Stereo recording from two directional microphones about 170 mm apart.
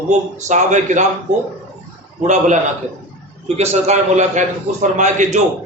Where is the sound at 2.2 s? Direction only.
45° right (ahead or behind).